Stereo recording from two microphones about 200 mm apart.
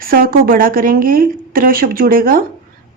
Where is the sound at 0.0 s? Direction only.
45° right (ahead or behind).